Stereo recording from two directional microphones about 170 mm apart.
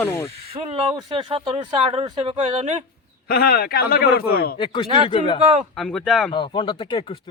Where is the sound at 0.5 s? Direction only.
35° right (ahead or behind).